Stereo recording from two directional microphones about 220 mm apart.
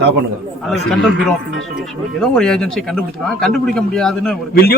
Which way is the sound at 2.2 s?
Centre (ahead or behind).